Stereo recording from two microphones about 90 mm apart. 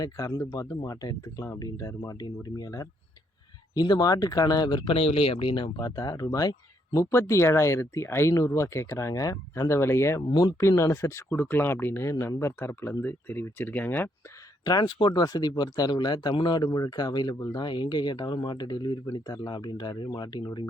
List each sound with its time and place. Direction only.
0.0 s speech: 45° left (ahead or behind)
4.9 s speech: 90° left; by 10.2 s 30° left (ahead or behind)
10.2 s speech: 50° left (ahead or behind)
10.6 s speech: 30° left (ahead or behind)
14.6 s speech: 50° left (ahead or behind)